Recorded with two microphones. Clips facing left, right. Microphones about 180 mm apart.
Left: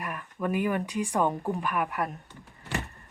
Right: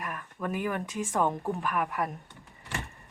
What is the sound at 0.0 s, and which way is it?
Speech, centre (ahead or behind).